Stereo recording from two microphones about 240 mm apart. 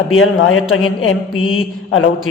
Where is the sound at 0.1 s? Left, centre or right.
Left.